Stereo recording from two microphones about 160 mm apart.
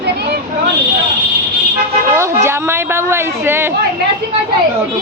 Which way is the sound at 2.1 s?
15° right (ahead or behind).